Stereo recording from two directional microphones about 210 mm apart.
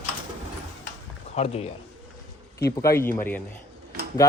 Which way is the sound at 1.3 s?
30° left (ahead or behind).